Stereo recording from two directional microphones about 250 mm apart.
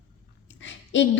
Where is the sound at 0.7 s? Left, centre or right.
Left.